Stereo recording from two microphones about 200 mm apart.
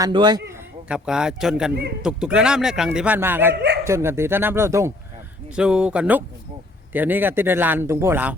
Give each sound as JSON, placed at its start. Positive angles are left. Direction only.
{"t": 0.0, "sound": "speech", "side_deg": -20}
{"t": 0.9, "sound": "a man's voice", "side_deg": -5}
{"t": 3.5, "sound": "speech", "side_deg": -55}
{"t": 3.8, "sound": "a man's voice", "side_deg": -15}